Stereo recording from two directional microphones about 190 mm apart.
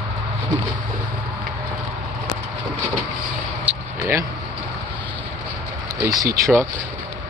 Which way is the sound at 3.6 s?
15° right (ahead or behind).